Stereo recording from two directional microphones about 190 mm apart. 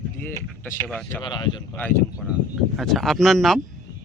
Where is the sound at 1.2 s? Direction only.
25° left (ahead or behind).